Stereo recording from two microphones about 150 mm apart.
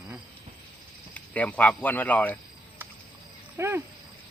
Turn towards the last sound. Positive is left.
turn(degrees=-15)  # may be behind; listen again after turning